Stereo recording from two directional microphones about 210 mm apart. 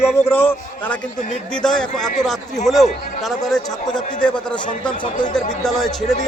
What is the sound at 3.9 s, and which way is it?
Speech, 20° left (ahead or behind).